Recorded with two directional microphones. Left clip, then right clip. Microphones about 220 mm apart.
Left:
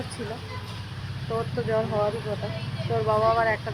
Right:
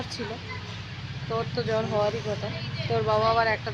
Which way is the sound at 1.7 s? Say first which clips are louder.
Left 1 dB; 10° right (ahead or behind).